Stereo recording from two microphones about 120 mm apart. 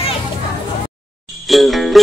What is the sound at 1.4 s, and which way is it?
Music, centre (ahead or behind).